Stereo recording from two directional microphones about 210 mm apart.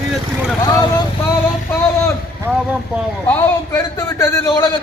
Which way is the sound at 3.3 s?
15° left (ahead or behind).